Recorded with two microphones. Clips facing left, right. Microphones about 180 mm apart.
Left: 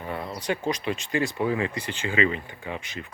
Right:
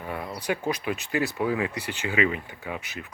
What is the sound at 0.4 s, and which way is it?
Speech, 5° right (ahead or behind).